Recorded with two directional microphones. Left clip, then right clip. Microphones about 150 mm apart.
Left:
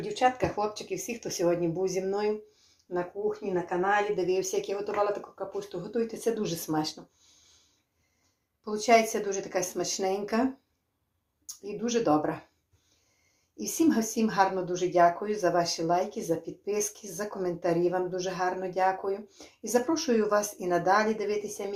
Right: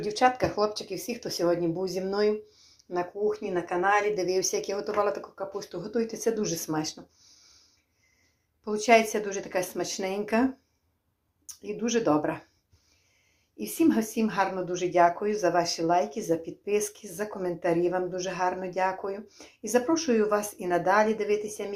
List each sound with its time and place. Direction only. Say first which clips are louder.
0.0 s speech: right 2 dB; 45° right (ahead or behind); by 2.1 s 30° right (ahead or behind)
2.9 s speech: right 3 dB; 45° right (ahead or behind)
5.5 s speech: right 1 dB; 35° right (ahead or behind)
8.6 s speech: right 1 dB; 30° right (ahead or behind)
11.4 s speech: right 2 dB; 30° right (ahead or behind)
13.6 s speech: right 1 dB; 20° right (ahead or behind)